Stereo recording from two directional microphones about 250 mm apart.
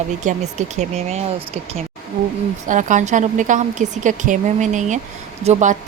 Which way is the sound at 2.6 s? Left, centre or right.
Right.